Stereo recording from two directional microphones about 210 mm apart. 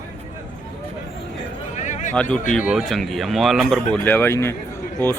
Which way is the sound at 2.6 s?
Centre (ahead or behind).